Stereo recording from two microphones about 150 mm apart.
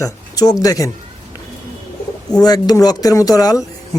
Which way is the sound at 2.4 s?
25° left (ahead or behind).